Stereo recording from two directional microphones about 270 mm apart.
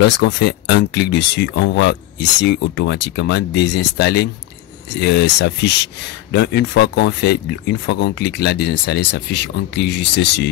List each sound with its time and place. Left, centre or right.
0.0 s speech: left